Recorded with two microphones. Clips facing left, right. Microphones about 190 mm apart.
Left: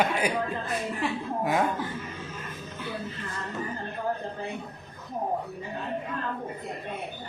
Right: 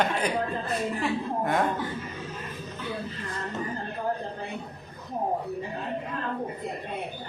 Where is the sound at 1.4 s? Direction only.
5° left (ahead or behind).